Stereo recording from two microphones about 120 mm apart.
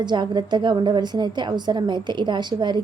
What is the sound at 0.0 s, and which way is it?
A woman's voice, 40° right (ahead or behind).